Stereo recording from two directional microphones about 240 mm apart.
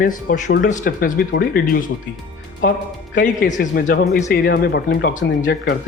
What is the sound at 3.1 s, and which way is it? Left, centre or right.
Speech, left.